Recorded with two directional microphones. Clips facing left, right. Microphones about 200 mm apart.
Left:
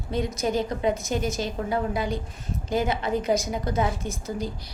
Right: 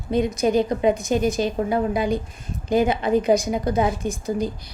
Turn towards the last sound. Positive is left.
turn(degrees=-15)  # may be behind; listen again after turning